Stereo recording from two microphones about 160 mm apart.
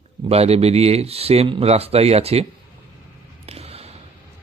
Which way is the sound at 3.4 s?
40° right (ahead or behind).